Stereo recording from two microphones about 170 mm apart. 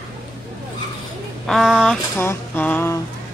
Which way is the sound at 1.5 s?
Centre (ahead or behind).